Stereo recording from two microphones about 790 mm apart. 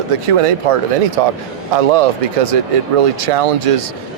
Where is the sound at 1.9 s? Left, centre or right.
Right.